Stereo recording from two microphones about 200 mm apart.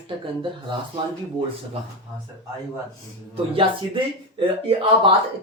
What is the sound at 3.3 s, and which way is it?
Speech, 25° right (ahead or behind).